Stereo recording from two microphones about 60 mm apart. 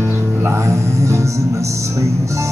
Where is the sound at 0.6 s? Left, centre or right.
Right.